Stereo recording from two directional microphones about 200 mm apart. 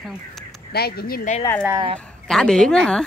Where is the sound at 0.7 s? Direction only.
50° left (ahead or behind).